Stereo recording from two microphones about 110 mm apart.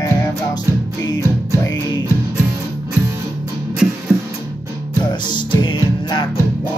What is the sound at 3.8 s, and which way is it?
Music, 10° right (ahead or behind).